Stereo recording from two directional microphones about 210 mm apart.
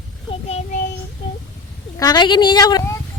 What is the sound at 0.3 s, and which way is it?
Child singing, 30° left (ahead or behind).